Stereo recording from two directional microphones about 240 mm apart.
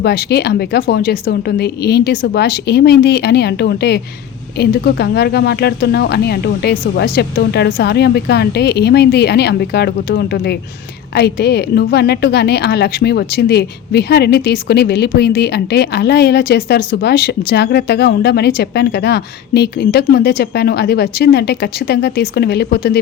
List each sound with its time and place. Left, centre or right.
0.0 s a woman's voice: left